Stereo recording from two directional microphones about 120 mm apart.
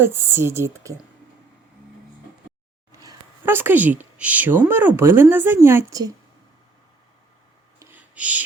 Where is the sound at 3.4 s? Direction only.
20° right (ahead or behind).